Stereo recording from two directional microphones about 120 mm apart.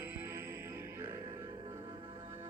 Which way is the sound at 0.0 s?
20° right (ahead or behind).